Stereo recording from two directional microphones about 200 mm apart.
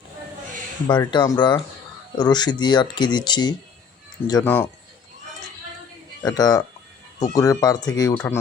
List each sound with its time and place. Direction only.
0.9 s speech: 25° left (ahead or behind)
4.4 s speech: 10° left (ahead or behind)
6.2 s speech: 20° left (ahead or behind)